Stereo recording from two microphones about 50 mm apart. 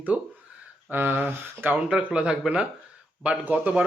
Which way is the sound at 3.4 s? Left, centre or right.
Right.